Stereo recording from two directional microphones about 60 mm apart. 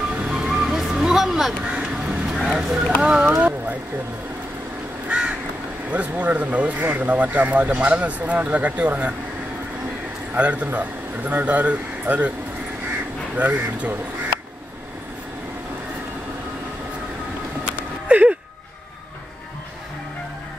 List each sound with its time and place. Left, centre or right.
0.2 s music: centre
1.8 s a sound: centre
3.0 s speech: centre
5.9 s speech: right
10.3 s speech: right
13.4 s speech: right
18.0 s a sound: right